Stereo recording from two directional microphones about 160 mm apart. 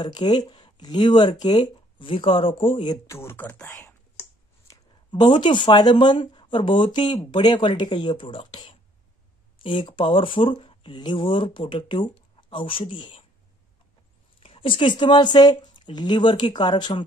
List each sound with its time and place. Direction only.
0.0 s speech: 25° left (ahead or behind)
3.1 s speech: 15° left (ahead or behind)
4.6 s speech: 30° left (ahead or behind)
14.4 s speech: 35° left (ahead or behind)